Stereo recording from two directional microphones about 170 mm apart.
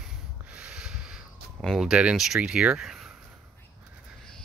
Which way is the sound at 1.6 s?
Centre (ahead or behind).